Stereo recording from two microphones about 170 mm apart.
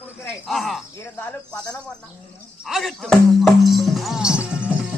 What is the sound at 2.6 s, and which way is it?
Speech, centre (ahead or behind).